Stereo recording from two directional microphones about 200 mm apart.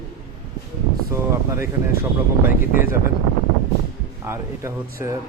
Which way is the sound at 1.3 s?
10° right (ahead or behind).